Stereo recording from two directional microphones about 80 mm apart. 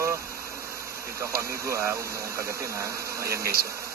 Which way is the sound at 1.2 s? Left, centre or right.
Right.